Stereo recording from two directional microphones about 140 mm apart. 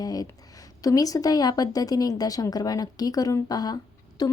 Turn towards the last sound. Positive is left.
turn(degrees=30)  # may be behind; listen again after turning